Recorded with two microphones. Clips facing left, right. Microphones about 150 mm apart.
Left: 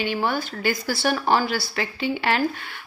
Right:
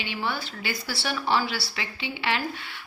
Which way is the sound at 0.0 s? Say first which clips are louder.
Left 7 dB; 45° left (ahead or behind).